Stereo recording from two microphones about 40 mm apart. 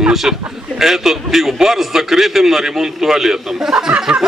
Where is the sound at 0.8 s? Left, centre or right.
Centre.